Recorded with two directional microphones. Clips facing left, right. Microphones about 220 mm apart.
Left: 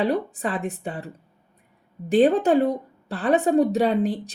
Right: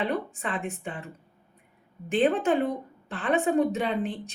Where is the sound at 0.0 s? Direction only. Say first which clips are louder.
Left 6 dB; 35° left (ahead or behind).